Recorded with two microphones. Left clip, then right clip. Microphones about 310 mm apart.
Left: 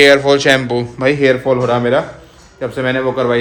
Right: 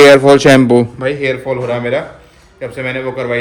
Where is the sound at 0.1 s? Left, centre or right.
Centre.